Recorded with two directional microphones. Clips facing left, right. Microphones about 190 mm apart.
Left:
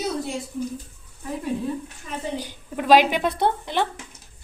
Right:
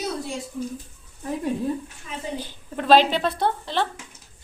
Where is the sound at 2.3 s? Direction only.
15° left (ahead or behind).